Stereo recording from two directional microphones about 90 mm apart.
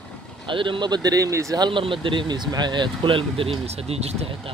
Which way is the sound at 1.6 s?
70° right (ahead or behind).